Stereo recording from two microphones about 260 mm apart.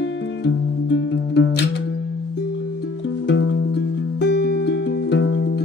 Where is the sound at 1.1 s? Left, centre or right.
Left.